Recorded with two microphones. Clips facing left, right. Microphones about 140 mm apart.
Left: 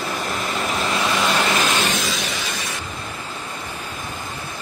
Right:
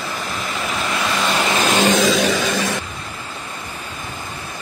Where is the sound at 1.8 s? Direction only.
50° right (ahead or behind).